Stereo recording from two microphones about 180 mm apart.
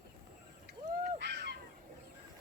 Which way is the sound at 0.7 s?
70° right (ahead or behind).